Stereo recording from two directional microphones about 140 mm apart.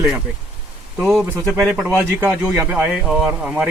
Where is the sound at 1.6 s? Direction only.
10° right (ahead or behind).